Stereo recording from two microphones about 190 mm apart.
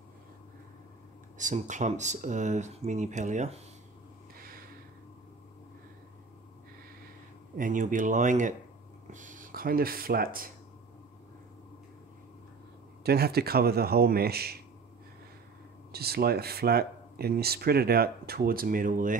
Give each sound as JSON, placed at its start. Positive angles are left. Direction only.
{"t": 1.4, "sound": "speech", "side_deg": -40}
{"t": 7.5, "sound": "speech", "side_deg": -45}
{"t": 13.0, "sound": "speech", "side_deg": -55}
{"t": 15.9, "sound": "speech", "side_deg": -55}